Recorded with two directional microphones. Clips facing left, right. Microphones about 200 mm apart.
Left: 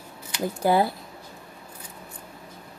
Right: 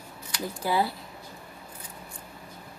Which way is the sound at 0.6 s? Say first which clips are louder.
Left 6 dB; 50° left (ahead or behind).